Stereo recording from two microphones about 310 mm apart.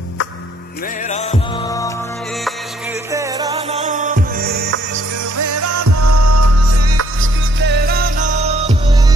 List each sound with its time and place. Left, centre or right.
1.0 s music: left
3.1 s music: centre; by 4.7 s right
5.4 s music: right
7.6 s music: right